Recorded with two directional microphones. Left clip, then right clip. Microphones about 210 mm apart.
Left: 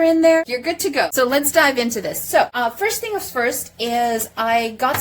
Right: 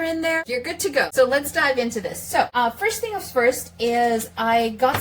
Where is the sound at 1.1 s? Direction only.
45° left (ahead or behind).